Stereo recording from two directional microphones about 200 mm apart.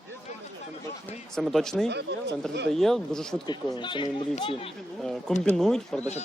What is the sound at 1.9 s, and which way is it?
Speech, 60° right (ahead or behind).